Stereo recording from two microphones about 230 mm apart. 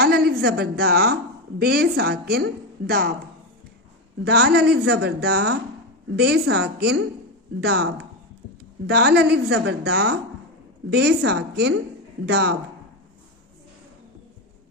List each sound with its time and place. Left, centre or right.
0.0 s a woman's voice: right
4.2 s a woman's voice: right